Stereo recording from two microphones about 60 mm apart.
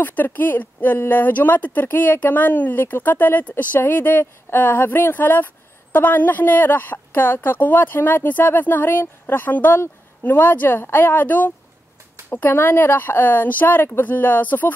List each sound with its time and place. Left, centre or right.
0.0 s a woman's voice: left